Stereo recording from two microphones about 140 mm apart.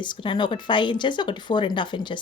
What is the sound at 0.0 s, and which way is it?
Speech, 35° left (ahead or behind).